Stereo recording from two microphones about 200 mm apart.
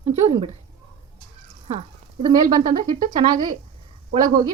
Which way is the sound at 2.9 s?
40° right (ahead or behind).